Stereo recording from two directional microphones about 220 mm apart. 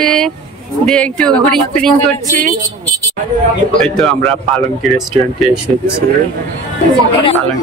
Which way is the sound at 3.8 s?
5° left (ahead or behind).